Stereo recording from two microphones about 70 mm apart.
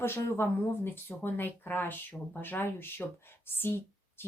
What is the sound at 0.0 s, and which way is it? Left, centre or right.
A woman's voice, left.